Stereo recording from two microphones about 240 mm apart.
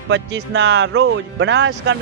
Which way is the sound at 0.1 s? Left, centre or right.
Right.